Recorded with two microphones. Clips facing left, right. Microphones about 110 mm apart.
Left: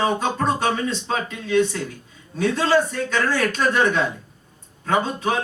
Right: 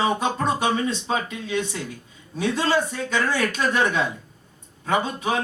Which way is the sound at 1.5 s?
50° left (ahead or behind).